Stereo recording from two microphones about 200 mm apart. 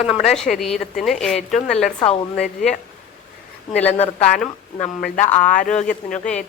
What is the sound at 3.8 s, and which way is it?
Speech, 35° left (ahead or behind).